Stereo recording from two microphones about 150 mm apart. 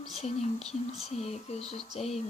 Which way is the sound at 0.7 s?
45° left (ahead or behind).